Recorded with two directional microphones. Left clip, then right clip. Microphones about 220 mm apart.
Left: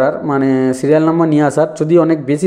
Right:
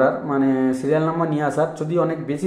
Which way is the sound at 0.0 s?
40° left (ahead or behind).